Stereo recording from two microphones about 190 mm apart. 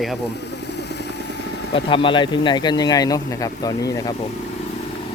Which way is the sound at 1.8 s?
25° left (ahead or behind).